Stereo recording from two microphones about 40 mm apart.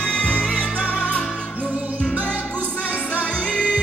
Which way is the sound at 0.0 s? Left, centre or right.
Left.